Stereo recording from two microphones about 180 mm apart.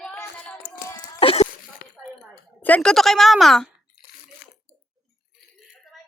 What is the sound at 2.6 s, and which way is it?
A woman's voice, 5° left (ahead or behind).